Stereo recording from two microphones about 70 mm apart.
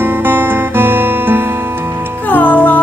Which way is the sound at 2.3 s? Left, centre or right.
Left.